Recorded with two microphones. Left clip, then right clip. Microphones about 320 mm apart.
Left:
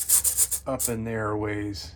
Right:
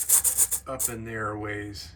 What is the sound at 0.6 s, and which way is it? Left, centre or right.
Speech, centre.